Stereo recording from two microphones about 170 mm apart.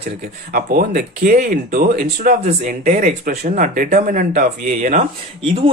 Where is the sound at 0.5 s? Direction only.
55° right (ahead or behind).